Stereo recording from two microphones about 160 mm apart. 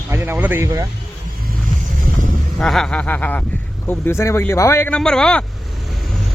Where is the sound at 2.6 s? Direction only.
5° left (ahead or behind).